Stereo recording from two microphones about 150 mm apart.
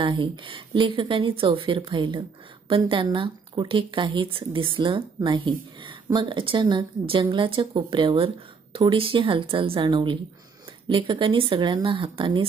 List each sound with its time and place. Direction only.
0.0 s speech: 35° right (ahead or behind)